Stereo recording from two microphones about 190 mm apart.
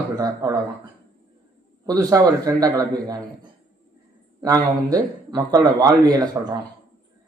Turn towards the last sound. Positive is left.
turn(degrees=-20)  # may be behind; listen again after turning